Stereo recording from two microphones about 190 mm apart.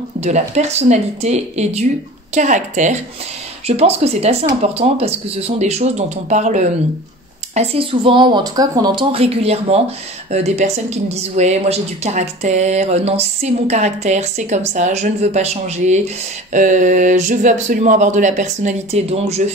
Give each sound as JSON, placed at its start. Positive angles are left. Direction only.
{"t": 0.2, "sound": "speech", "side_deg": -35}